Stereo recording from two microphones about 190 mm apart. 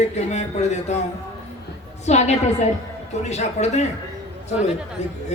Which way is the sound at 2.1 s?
35° left (ahead or behind).